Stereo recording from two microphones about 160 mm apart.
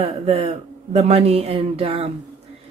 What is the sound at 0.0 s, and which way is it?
Speech, 40° right (ahead or behind).